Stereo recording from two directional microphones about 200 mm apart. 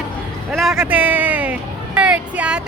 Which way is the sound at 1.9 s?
5° right (ahead or behind).